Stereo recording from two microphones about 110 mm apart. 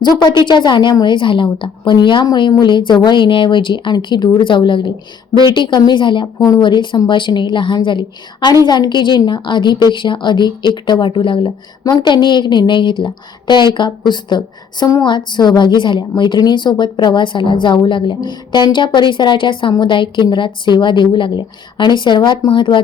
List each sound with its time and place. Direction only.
0.0 s a woman's voice: 40° left (ahead or behind)